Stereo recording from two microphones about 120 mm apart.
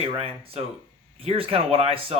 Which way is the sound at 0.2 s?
55° right (ahead or behind).